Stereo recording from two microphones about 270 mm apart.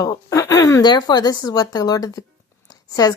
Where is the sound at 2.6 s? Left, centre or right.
Centre.